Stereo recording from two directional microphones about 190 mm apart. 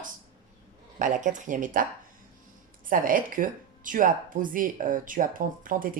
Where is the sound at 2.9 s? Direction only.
45° right (ahead or behind).